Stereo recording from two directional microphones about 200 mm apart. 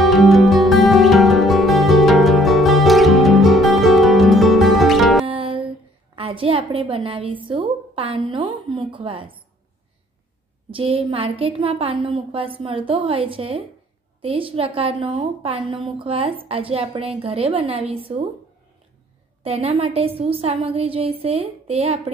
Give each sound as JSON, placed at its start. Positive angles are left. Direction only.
{"t": 0.0, "sound": "music", "side_deg": 0}
{"t": 5.3, "sound": "music", "side_deg": -25}
{"t": 6.1, "sound": "a woman's voice", "side_deg": -25}
{"t": 10.7, "sound": "a woman's voice", "side_deg": -25}
{"t": 19.4, "sound": "a woman's voice", "side_deg": -30}